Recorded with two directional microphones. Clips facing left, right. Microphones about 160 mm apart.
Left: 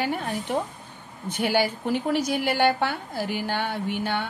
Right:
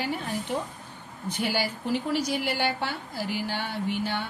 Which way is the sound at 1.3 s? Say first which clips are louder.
Left 5 dB; 55° left (ahead or behind).